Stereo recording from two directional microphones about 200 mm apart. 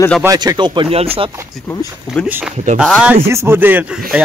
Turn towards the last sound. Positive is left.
turn(degrees=-10)  # may be behind; listen again after turning